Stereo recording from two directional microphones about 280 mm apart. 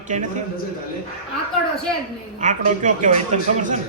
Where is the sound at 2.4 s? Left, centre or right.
Right.